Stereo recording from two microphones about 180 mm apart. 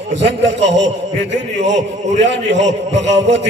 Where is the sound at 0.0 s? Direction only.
80° right.